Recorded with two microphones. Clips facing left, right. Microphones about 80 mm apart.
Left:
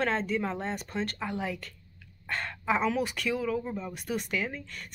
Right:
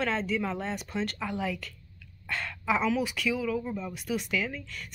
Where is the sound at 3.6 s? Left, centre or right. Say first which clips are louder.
Right 1 dB; centre.